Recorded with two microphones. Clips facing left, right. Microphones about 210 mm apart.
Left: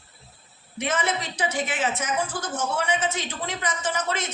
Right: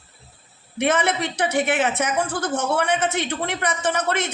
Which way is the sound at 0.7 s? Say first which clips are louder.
Right 6 dB; 65° right (ahead or behind).